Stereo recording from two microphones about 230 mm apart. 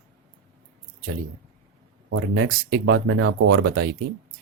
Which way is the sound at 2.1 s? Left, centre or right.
Right.